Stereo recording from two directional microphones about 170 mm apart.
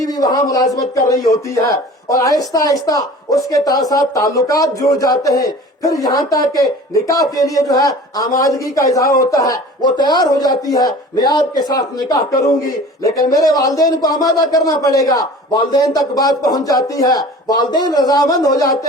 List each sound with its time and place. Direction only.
0.0 s speech: 20° left (ahead or behind)